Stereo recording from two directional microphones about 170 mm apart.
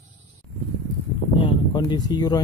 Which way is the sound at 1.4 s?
25° left (ahead or behind).